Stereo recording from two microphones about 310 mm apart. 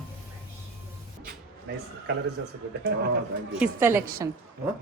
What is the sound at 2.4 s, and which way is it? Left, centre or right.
Speech, right.